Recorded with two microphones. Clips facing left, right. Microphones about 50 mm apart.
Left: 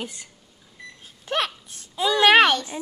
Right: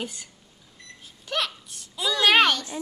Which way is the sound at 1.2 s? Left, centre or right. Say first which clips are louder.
Left 3 dB; left.